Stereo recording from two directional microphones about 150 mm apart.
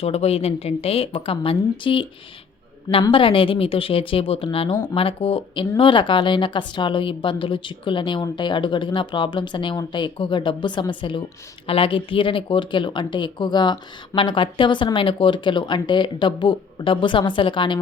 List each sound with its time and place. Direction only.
0.0 s speech: 45° left (ahead or behind)